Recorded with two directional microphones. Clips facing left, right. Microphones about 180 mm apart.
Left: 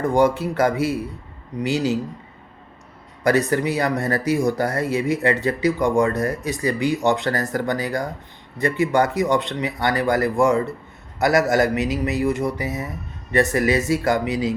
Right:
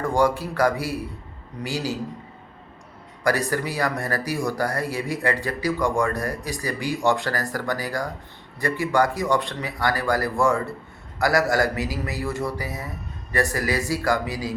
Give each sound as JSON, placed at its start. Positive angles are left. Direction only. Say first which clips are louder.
{"t": 0.0, "sound": "speech", "louder": "left 3 dB", "side_deg": 20}
{"t": 3.2, "sound": "speech", "louder": "left 5 dB", "side_deg": 20}